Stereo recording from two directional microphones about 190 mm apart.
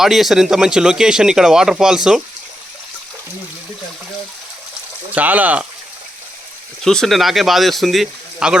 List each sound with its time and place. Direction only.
0.0 s speech: centre (ahead or behind)
5.1 s speech: 10° right (ahead or behind)
6.8 s speech: centre (ahead or behind)